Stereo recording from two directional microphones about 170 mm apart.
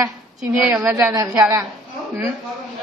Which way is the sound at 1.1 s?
20° right (ahead or behind).